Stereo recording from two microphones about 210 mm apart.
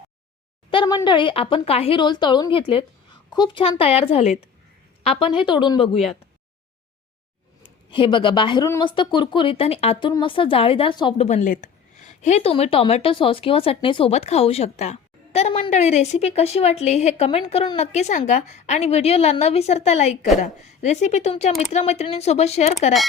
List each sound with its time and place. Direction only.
0.7 s speech: 20° left (ahead or behind)
7.9 s speech: 25° left (ahead or behind)